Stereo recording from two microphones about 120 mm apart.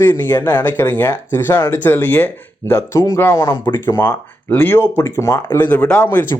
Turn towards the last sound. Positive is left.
turn(degrees=15)  # may be behind; listen again after turning